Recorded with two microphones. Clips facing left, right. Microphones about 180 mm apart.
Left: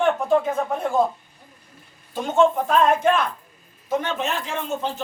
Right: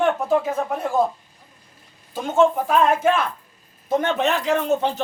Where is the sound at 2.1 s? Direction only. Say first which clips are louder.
Right 1 dB; centre (ahead or behind).